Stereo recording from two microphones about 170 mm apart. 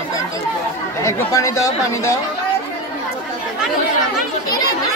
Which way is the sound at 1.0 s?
20° left (ahead or behind).